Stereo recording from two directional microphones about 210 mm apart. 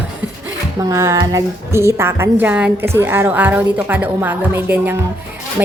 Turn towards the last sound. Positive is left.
turn(degrees=-10)  # may be behind; listen again after turning